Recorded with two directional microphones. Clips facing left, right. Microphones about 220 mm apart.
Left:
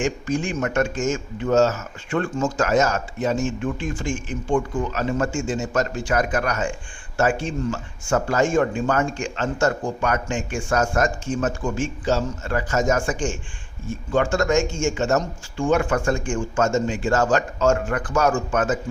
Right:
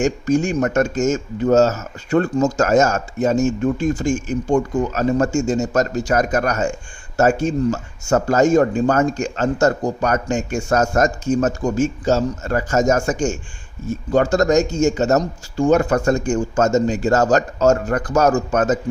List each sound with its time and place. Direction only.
0.0 s speech: 45° right (ahead or behind)